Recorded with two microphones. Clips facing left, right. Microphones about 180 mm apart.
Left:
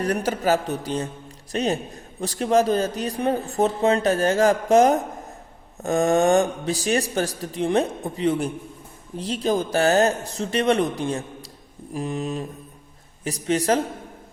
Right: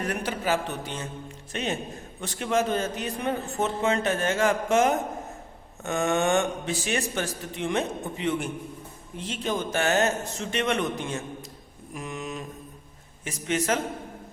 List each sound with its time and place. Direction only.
0.0 s a man's voice: 40° left (ahead or behind)